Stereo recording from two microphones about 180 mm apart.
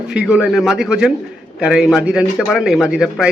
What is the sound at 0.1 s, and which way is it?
Speech, 5° right (ahead or behind).